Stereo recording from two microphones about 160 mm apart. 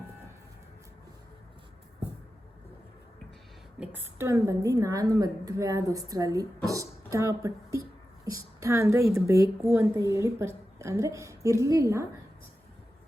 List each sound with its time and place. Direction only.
3.8 s a woman's voice: 15° right (ahead or behind)